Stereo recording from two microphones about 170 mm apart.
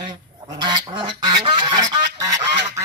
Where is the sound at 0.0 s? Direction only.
25° right (ahead or behind).